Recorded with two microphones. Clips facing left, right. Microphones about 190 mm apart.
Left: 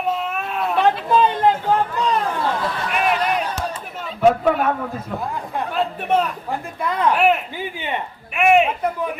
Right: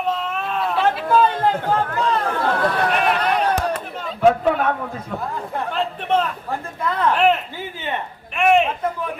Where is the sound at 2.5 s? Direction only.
65° right (ahead or behind).